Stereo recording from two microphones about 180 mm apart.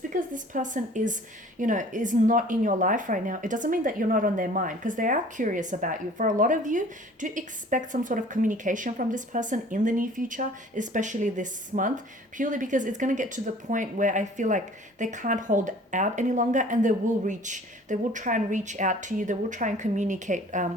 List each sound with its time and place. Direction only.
0.1 s speech: 45° right (ahead or behind)